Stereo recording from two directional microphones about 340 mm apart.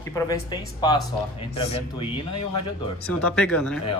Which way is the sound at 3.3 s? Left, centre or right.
Centre.